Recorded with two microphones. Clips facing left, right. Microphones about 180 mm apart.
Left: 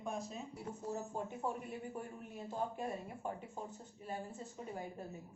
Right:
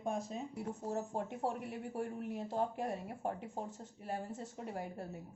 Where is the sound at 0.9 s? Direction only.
75° right (ahead or behind).